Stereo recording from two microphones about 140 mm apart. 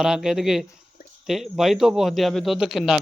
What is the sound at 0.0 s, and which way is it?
Speech, 5° right (ahead or behind).